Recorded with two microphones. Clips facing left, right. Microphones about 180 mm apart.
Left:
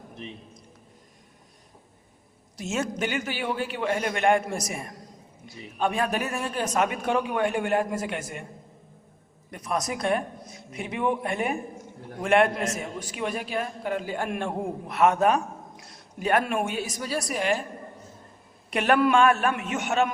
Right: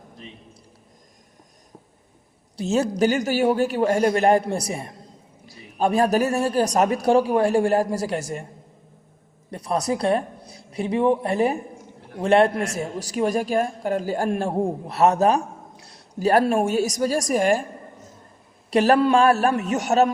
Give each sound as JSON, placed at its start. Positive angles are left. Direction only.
{"t": 2.6, "sound": "a man's voice", "side_deg": -35}
{"t": 9.5, "sound": "a man's voice", "side_deg": -35}
{"t": 18.7, "sound": "a man's voice", "side_deg": -35}